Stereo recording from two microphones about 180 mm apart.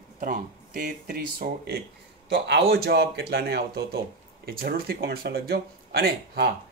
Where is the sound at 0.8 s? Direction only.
60° right (ahead or behind).